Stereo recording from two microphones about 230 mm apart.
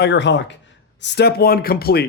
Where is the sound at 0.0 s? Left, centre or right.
Left.